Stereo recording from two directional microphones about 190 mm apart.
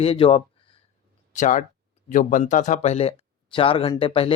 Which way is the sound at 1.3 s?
45° left (ahead or behind).